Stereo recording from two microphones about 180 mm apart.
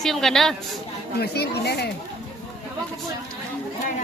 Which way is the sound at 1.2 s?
60° left (ahead or behind).